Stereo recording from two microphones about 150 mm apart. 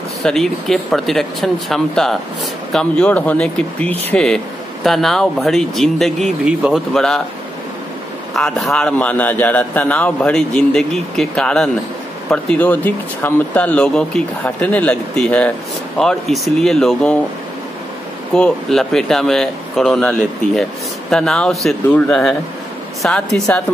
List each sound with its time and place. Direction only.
0.2 s a man's voice: centre (ahead or behind)
8.4 s a man's voice: centre (ahead or behind)
18.3 s a man's voice: 5° left (ahead or behind)
21.8 s a man's voice: 15° left (ahead or behind)